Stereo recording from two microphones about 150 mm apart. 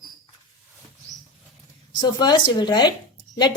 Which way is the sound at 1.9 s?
30° left (ahead or behind).